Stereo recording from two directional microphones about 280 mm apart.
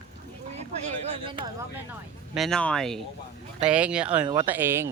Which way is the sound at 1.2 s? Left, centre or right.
Centre.